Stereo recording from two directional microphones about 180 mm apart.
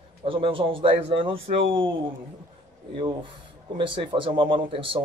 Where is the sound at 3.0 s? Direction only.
25° right (ahead or behind).